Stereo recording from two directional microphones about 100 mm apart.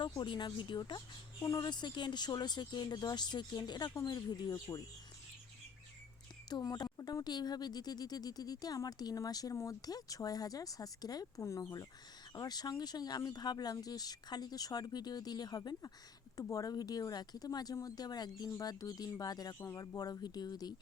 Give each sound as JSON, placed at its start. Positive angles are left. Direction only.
{"t": 0.2, "sound": "a woman's voice", "side_deg": 50}
{"t": 6.5, "sound": "speech", "side_deg": 40}